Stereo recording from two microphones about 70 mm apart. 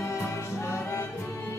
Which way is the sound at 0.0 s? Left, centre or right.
Left.